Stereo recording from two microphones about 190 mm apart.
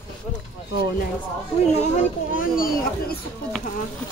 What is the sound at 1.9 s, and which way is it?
Speech, 45° left (ahead or behind).